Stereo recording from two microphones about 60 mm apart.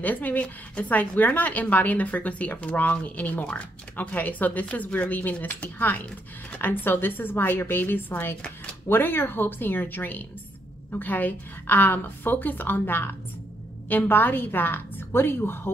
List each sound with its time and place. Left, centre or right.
0.0 s a woman's voice: left